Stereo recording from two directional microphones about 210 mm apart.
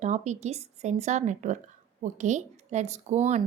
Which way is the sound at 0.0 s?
35° right (ahead or behind).